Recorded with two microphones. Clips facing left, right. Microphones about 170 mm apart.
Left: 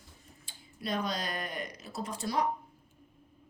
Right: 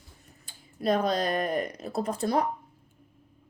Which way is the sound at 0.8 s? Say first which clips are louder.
Right 9 dB; 55° right (ahead or behind).